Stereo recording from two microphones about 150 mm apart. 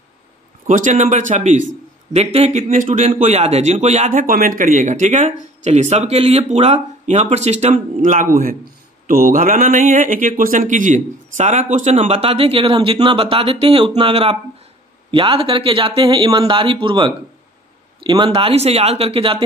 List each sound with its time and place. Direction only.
0.7 s speech: 55° right (ahead or behind); by 19.4 s 40° right (ahead or behind)